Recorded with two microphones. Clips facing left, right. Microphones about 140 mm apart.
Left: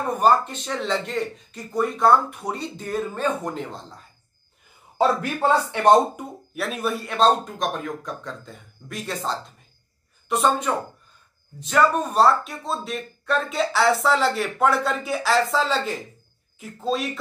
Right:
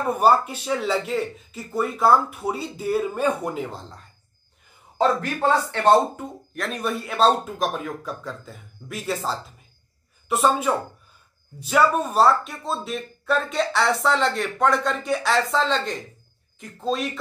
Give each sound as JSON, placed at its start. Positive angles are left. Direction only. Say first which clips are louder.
{"t": 0.0, "sound": "speech", "louder": "right 1 dB", "side_deg": -10}
{"t": 4.9, "sound": "a woman's voice", "louder": "even", "side_deg": 10}